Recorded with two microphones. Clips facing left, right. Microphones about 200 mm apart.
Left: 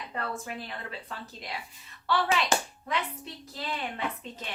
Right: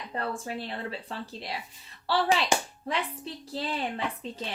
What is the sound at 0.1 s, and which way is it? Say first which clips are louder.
Speech: right 3 dB; 30° right (ahead or behind).